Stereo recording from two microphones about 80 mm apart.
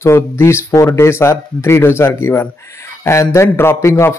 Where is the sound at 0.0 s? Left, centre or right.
Left.